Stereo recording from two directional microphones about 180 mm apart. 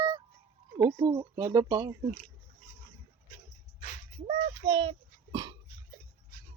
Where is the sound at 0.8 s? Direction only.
20° right (ahead or behind).